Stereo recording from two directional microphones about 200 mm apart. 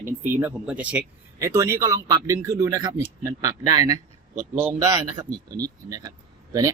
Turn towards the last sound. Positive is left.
turn(degrees=-15)  # may be behind; listen again after turning